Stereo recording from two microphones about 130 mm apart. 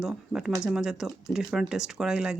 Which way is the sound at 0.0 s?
5° right (ahead or behind).